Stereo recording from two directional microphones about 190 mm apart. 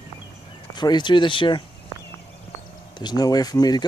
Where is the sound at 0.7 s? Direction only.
25° left (ahead or behind).